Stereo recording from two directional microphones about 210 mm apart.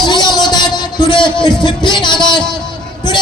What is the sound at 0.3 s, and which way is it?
Music, 20° left (ahead or behind).